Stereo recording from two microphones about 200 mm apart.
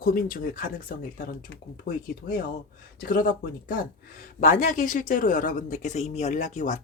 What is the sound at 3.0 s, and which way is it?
Speech, 45° left (ahead or behind).